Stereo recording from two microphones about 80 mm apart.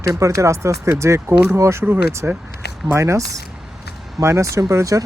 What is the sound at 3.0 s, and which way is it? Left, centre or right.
Speech, right.